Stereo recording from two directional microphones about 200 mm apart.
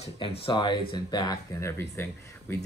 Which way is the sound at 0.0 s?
25° left (ahead or behind).